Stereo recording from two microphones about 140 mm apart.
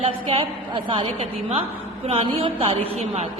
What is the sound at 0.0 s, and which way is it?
A woman's voice, 40° right (ahead or behind).